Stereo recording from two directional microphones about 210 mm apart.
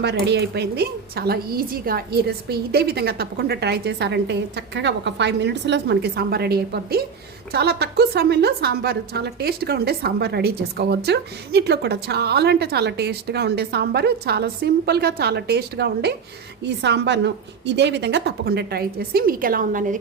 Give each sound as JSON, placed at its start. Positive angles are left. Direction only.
{"t": 0.0, "sound": "a woman's voice", "side_deg": -55}